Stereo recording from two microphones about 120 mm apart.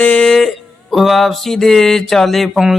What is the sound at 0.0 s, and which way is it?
Music, 10° left (ahead or behind).